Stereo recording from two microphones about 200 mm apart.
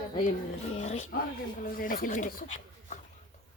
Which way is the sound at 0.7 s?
35° left (ahead or behind).